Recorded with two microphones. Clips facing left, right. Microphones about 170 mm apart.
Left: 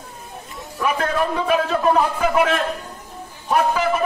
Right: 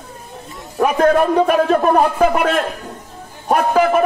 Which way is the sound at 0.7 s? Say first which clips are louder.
Right 8 dB; 45° right (ahead or behind).